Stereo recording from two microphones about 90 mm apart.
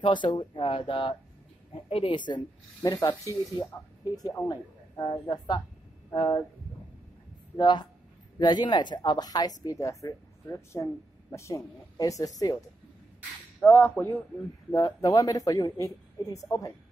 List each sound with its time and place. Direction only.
0.0 s speech: 60° left (ahead or behind)
7.5 s speech: 55° left (ahead or behind)
13.7 s speech: 25° left (ahead or behind)
14.7 s speech: 40° left (ahead or behind)